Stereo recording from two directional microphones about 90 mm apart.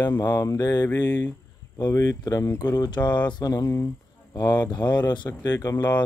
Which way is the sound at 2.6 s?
45° left (ahead or behind).